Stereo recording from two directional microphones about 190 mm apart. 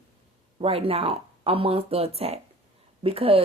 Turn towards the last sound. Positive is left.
turn(degrees=-30)  # may be behind; listen again after turning